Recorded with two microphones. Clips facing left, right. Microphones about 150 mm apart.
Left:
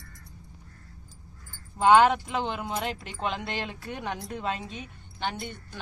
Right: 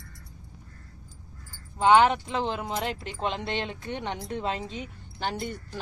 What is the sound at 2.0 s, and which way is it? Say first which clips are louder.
Speech: even; 5° left (ahead or behind).